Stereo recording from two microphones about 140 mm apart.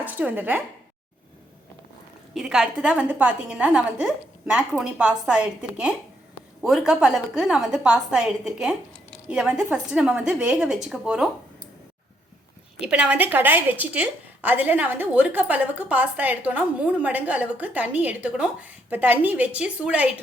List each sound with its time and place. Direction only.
0.0 s a woman's voice: 10° right (ahead or behind)
2.3 s a woman's voice: 5° right (ahead or behind)
12.8 s a woman's voice: 10° right (ahead or behind)